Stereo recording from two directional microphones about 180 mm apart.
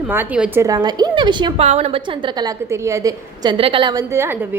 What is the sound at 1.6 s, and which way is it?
A woman's voice, 35° right (ahead or behind).